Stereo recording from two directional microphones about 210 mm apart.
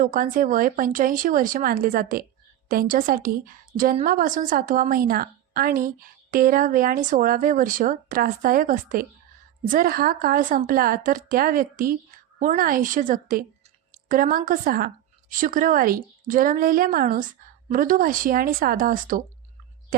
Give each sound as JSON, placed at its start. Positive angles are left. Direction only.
{"t": 0.0, "sound": "a woman's voice", "side_deg": -40}